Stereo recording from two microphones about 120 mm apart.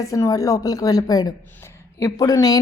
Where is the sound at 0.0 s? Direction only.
30° left (ahead or behind).